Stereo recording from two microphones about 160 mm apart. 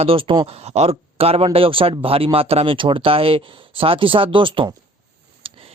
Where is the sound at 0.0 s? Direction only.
35° right (ahead or behind).